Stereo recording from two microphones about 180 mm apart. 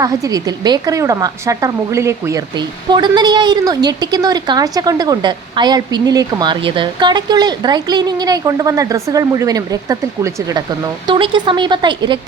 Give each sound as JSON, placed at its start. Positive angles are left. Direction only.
{"t": 0.0, "sound": "a woman's voice", "side_deg": -20}
{"t": 11.0, "sound": "a woman's voice", "side_deg": -25}